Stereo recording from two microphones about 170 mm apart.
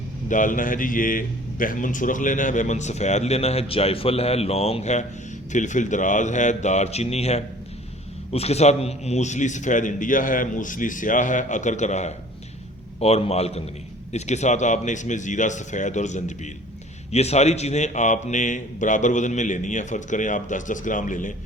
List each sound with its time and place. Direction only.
0.3 s a man's voice: 50° left (ahead or behind)